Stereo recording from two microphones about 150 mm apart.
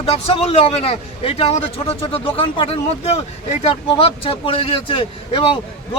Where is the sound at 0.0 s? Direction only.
40° left (ahead or behind).